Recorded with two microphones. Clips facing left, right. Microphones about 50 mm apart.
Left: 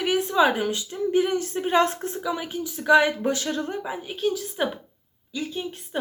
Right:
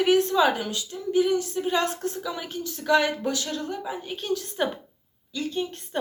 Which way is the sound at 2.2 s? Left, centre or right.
Centre.